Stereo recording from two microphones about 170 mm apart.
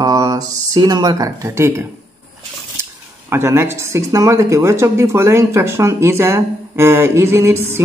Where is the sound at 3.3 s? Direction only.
15° right (ahead or behind).